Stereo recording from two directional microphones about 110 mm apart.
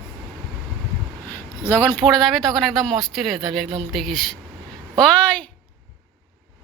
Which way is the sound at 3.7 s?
55° right (ahead or behind).